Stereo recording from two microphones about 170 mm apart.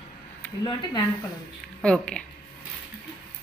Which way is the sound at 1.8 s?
5° left (ahead or behind).